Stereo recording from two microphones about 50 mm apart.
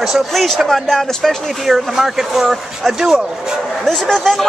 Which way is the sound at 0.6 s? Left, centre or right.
Centre.